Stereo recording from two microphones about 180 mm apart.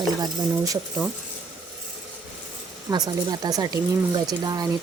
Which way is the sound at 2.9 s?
20° right (ahead or behind).